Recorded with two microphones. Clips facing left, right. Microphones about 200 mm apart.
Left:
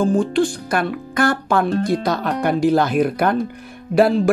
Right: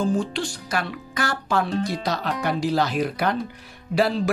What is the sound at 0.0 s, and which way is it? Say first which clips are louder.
Speech: left 7 dB; 50° left (ahead or behind).